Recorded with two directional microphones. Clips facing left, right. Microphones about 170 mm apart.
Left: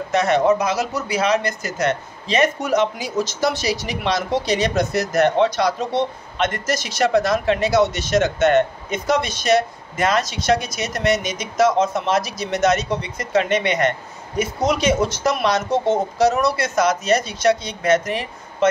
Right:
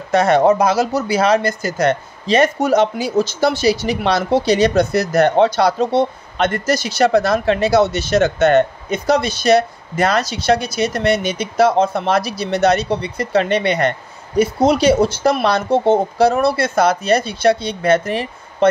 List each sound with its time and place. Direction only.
0.1 s speech: 35° right (ahead or behind)